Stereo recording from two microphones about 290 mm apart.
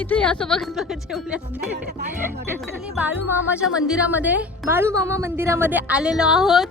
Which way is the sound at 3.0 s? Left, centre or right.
Centre.